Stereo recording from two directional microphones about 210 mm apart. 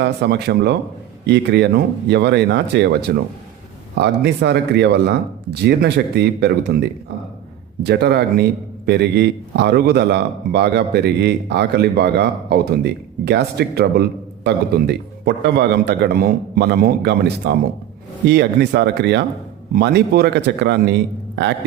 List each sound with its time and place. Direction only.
0.0 s speech: 55° right (ahead or behind)